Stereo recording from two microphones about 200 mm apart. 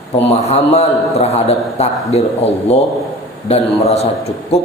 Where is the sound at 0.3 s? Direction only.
30° left (ahead or behind).